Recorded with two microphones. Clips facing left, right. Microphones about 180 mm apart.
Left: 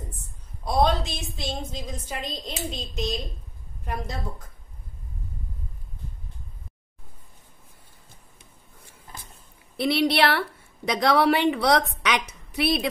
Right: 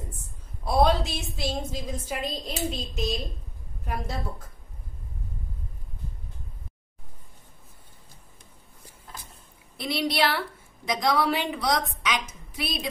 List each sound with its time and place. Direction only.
0.7 s a woman's voice: 5° right (ahead or behind)
9.8 s a woman's voice: 65° left (ahead or behind)